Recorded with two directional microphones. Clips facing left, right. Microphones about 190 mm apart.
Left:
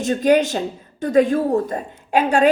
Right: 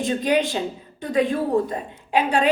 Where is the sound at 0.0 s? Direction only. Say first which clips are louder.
Left 5 dB; 45° left (ahead or behind).